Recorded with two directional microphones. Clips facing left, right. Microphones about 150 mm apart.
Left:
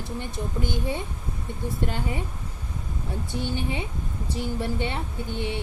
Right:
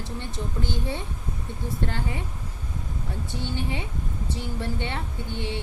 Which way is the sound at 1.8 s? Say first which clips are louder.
Left 1 dB; 15° left (ahead or behind).